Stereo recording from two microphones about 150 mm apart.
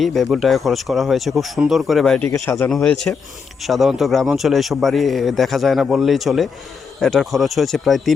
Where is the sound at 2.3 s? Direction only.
15° left (ahead or behind).